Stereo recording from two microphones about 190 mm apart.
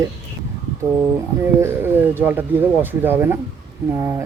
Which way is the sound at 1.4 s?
10° right (ahead or behind).